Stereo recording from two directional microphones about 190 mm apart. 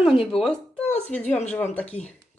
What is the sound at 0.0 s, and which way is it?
Speech, 25° left (ahead or behind).